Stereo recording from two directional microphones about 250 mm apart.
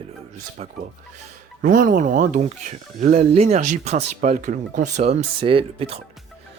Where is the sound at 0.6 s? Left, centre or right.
Right.